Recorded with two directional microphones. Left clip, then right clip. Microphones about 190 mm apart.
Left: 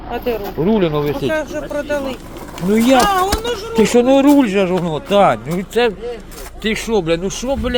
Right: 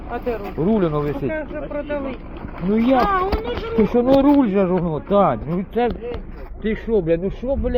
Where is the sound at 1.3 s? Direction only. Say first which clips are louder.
Left 6 dB; 65° left (ahead or behind).